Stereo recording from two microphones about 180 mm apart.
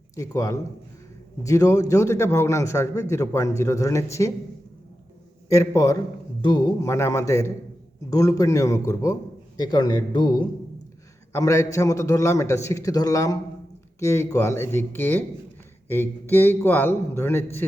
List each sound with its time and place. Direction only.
0.2 s a man's voice: 15° left (ahead or behind)
5.5 s a man's voice: 15° left (ahead or behind)